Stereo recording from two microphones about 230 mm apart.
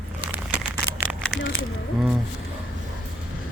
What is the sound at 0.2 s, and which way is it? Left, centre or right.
Crumpling, centre.